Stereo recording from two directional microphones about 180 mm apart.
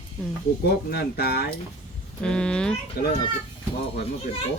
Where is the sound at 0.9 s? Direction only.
65° left (ahead or behind).